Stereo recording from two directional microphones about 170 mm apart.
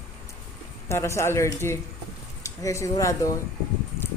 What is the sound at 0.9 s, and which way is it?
A woman's voice, 15° left (ahead or behind).